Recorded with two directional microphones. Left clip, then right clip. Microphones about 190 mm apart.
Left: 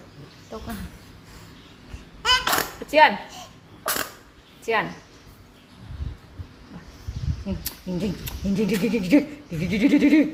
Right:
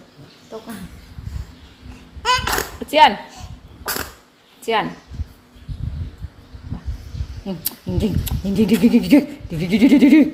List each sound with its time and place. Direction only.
2.2 s a sound: 15° left (ahead or behind)
3.9 s dog: 15° left (ahead or behind)
4.6 s a woman's voice: 40° right (ahead or behind)
7.4 s speech: 40° right (ahead or behind)